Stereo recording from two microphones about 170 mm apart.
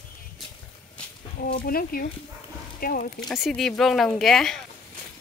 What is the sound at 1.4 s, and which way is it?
Speech, 60° left (ahead or behind).